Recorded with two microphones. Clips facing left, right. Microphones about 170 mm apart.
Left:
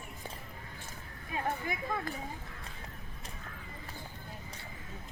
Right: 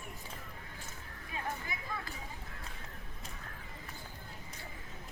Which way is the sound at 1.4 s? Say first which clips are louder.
Left 6 dB; 50° left (ahead or behind).